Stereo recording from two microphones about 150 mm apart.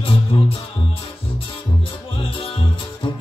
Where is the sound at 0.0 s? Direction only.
40° left (ahead or behind).